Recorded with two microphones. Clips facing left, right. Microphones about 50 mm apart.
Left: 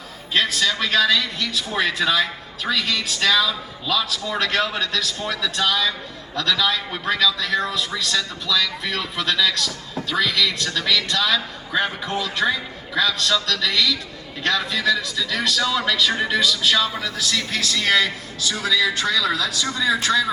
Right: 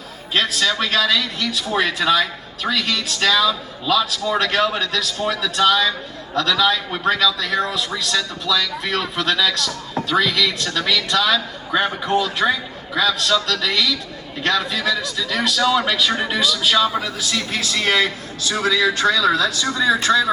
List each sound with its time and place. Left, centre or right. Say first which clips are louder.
0.3 s a man's voice: right 1 dB; centre; by 17.7 s right
17.7 s a man's voice: right 1 dB; right